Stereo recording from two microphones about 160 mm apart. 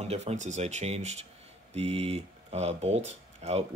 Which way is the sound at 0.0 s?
45° right (ahead or behind).